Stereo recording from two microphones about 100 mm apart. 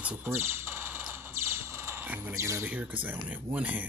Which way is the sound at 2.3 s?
30° right (ahead or behind).